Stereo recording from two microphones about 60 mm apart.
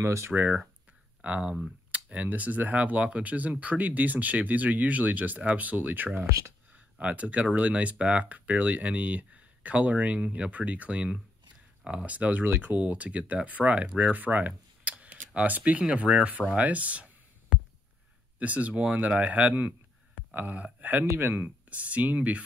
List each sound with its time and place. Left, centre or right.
0.0 s speech: right
0.3 s speech: right
6.2 s speech: right
6.7 s speech: right
12.1 s speech: right
18.4 s speech: right
21.1 s speech: right
21.6 s speech: right